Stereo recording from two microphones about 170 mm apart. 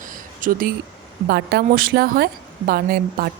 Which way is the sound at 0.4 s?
50° right (ahead or behind).